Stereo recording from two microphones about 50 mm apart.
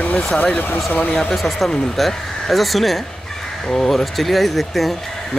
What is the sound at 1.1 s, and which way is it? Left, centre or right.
Speech, centre.